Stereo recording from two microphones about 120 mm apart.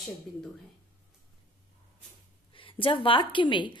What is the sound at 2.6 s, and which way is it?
A woman's voice, 45° left (ahead or behind).